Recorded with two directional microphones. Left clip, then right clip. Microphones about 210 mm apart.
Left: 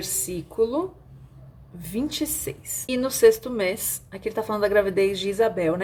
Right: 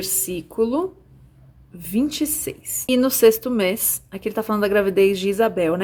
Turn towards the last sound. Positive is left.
turn(degrees=-30)  # may be behind; listen again after turning